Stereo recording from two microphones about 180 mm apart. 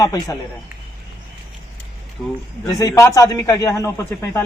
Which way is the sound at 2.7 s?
20° left (ahead or behind).